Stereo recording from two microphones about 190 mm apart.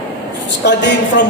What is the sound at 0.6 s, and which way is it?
Speech, 65° left (ahead or behind).